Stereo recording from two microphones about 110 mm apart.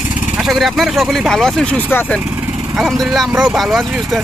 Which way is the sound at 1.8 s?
20° left (ahead or behind).